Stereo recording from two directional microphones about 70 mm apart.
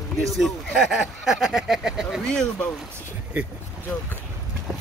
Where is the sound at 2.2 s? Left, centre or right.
Centre.